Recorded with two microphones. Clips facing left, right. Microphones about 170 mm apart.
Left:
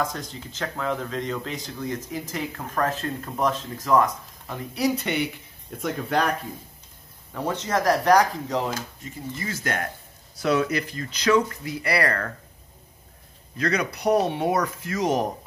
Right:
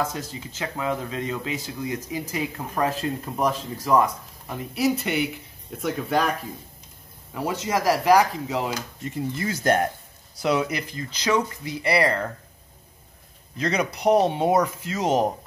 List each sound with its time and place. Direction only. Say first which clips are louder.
0.0 s speech: right 1 dB; 5° right (ahead or behind)
7.3 s speech: even; 10° right (ahead or behind)
9.5 s speech: right 8 dB; 30° right (ahead or behind)
10.4 s speech: left 1 dB; 15° right (ahead or behind)
13.6 s speech: even; 25° right (ahead or behind)